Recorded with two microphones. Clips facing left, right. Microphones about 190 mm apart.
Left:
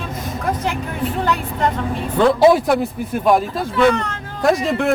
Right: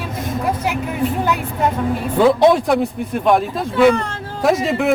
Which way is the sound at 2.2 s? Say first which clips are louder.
Even; centre (ahead or behind).